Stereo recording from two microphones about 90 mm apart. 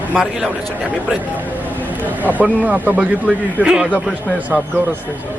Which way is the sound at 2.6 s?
15° right (ahead or behind).